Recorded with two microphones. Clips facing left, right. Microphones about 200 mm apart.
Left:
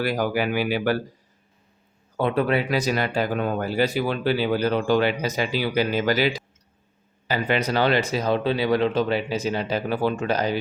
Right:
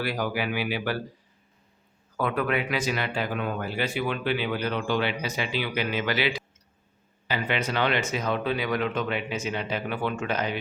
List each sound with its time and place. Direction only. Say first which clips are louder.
0.0 s speech: left 5 dB; 45° left (ahead or behind)
2.1 s speech: left 5 dB; 25° left (ahead or behind)